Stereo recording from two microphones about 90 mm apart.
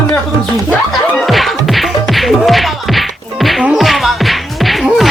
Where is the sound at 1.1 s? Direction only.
Centre (ahead or behind).